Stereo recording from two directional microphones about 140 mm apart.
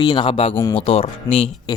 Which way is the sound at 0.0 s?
35° left (ahead or behind).